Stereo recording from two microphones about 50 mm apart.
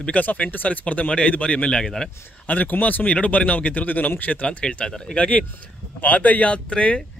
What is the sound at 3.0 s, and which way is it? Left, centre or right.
A man's voice, left.